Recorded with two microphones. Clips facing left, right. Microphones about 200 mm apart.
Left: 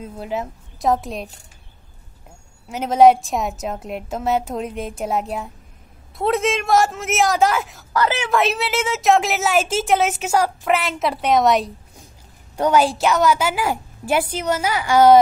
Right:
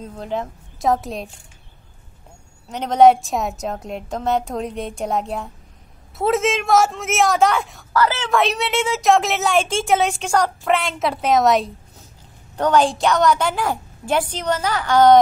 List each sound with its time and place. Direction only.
0.0 s a woman's voice: 5° left (ahead or behind)
2.7 s a woman's voice: 5° left (ahead or behind)
7.9 s speech: 15° left (ahead or behind)
8.3 s a woman's voice: centre (ahead or behind)